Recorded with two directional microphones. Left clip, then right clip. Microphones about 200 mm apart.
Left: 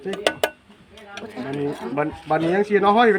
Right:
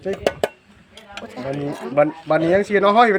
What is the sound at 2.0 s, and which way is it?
A man's voice, 60° right (ahead or behind).